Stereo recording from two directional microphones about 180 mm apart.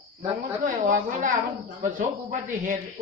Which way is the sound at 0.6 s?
45° right (ahead or behind).